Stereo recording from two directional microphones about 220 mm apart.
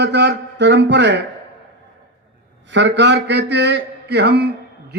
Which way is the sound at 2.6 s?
55° right (ahead or behind).